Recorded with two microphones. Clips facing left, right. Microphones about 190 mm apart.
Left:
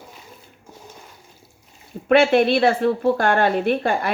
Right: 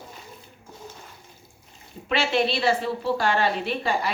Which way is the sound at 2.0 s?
55° left (ahead or behind).